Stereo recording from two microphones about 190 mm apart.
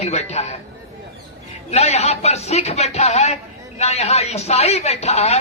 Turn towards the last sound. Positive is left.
turn(degrees=35)  # may be behind; listen again after turning